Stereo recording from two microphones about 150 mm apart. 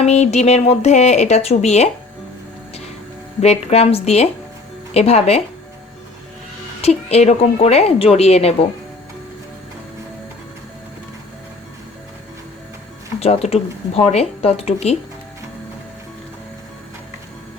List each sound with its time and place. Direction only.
0.0 s speech: 50° left (ahead or behind)
3.4 s speech: 45° left (ahead or behind)
6.8 s speech: 45° left (ahead or behind)
13.1 s speech: 45° left (ahead or behind)